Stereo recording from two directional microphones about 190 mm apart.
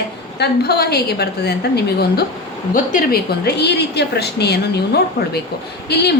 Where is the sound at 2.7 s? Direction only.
45° left (ahead or behind).